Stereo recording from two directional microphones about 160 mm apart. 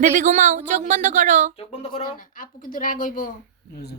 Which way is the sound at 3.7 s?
90° left.